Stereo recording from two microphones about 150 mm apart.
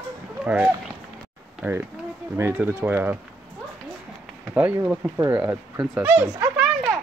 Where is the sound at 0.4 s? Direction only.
10° right (ahead or behind).